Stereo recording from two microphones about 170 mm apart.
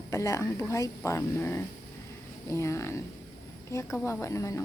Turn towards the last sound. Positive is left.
turn(degrees=20)  # may be behind; listen again after turning